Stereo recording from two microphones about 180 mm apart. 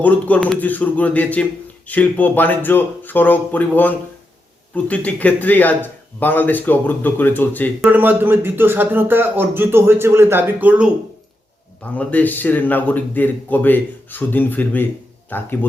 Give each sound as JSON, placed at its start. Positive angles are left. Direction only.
{"t": 0.0, "sound": "speech", "side_deg": 10}
{"t": 7.9, "sound": "a man's voice", "side_deg": -10}
{"t": 11.8, "sound": "speech", "side_deg": 10}